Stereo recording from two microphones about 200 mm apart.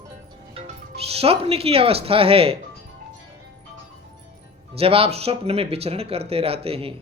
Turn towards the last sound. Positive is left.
turn(degrees=-30)  # may be behind; listen again after turning